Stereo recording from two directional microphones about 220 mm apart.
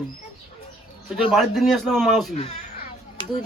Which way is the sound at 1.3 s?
Centre (ahead or behind).